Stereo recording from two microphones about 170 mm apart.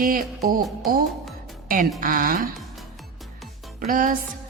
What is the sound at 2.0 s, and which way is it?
Speech, 55° right (ahead or behind).